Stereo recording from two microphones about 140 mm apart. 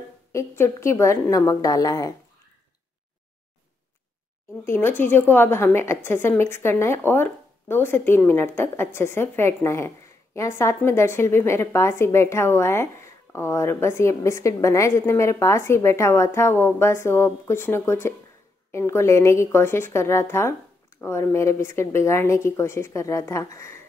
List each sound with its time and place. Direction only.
0.3 s a woman's voice: 20° left (ahead or behind)
4.6 s a woman's voice: 15° left (ahead or behind)